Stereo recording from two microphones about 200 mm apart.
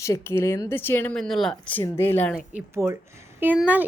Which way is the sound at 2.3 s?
10° right (ahead or behind).